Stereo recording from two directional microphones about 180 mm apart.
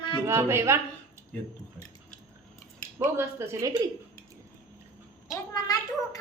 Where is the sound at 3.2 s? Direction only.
15° right (ahead or behind).